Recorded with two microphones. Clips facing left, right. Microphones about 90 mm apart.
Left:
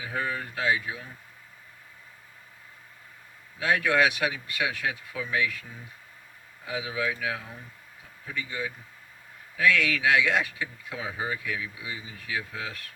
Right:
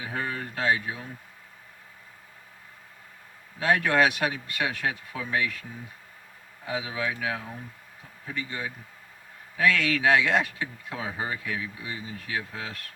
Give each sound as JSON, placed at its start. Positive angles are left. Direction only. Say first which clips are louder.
{"t": 0.6, "sound": "speech", "louder": "right 1 dB", "side_deg": -35}
{"t": 3.6, "sound": "speech", "louder": "right 1 dB", "side_deg": -40}
{"t": 6.7, "sound": "speech", "louder": "even", "side_deg": -35}